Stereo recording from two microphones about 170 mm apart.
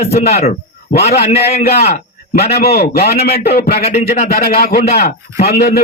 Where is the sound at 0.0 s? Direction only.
40° left (ahead or behind).